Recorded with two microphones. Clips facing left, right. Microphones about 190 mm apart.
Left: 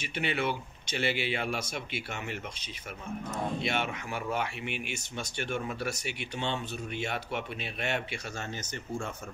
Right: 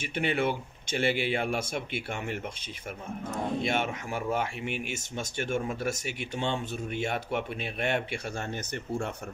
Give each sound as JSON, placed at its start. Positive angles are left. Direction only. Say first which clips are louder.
{"t": 0.0, "sound": "speech", "louder": "right 3 dB", "side_deg": -50}
{"t": 3.6, "sound": "speech", "louder": "right 3 dB", "side_deg": -45}